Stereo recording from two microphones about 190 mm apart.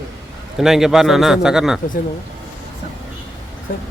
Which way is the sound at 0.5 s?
Centre (ahead or behind).